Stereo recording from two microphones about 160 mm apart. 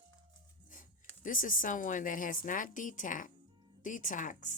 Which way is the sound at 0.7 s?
55° left (ahead or behind).